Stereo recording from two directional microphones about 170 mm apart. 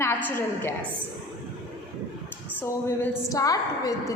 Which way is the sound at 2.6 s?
10° left (ahead or behind).